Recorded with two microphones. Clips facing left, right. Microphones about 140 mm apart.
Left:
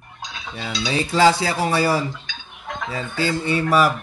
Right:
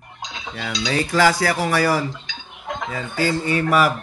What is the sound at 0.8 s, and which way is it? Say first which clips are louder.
Dishes: left 1 dB; 25° left (ahead or behind).